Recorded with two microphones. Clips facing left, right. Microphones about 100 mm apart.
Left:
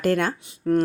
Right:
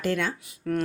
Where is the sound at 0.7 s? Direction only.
30° left (ahead or behind).